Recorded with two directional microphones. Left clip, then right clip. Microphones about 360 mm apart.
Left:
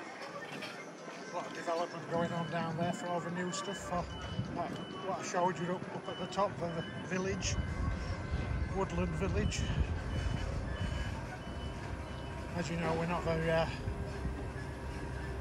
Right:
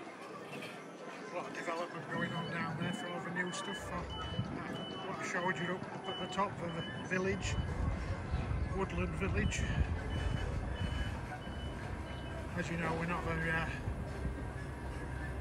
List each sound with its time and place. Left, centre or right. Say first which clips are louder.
1.3 s clip-clop: left 3 dB; centre
2.5 s speech: left 3 dB; centre
5.2 s speech: left 2 dB; centre
8.7 s speech: left 2 dB; centre
12.5 s speech: left 2 dB; centre